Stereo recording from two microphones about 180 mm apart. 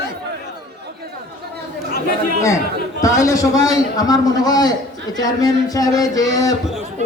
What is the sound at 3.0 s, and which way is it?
A man's voice, 15° left (ahead or behind).